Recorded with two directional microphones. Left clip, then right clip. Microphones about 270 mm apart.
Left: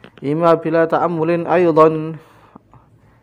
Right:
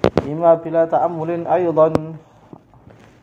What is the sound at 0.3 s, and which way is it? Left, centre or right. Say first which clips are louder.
A man's voice: left 4 dB; left.